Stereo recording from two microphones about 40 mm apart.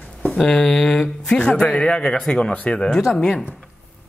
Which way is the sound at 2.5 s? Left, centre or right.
Left.